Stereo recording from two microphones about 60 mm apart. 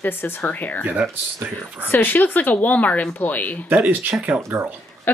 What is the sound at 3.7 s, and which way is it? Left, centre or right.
Speech, right.